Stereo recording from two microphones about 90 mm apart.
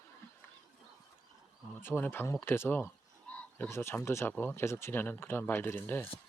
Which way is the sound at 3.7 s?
30° left (ahead or behind).